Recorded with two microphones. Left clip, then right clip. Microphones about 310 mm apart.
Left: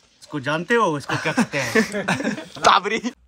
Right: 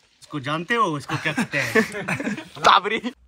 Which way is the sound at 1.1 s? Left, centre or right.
Left.